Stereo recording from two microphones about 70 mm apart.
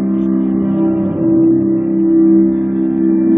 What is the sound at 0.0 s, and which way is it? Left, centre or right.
Music, centre.